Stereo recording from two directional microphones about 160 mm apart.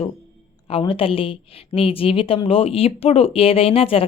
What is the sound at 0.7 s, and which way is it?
A woman's voice, 35° left (ahead or behind).